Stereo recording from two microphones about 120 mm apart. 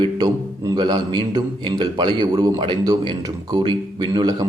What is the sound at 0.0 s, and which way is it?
A man's voice, 35° right (ahead or behind).